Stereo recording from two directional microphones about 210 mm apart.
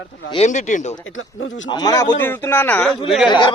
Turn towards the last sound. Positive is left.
turn(degrees=20)  # may be behind; listen again after turning